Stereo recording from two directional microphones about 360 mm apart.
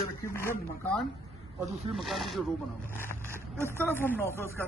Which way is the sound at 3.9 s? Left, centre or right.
Centre.